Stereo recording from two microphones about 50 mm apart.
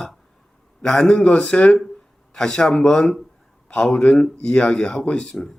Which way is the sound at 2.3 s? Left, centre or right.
Centre.